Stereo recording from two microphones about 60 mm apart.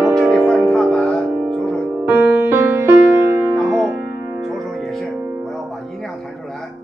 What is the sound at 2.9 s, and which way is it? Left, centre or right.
Music, right.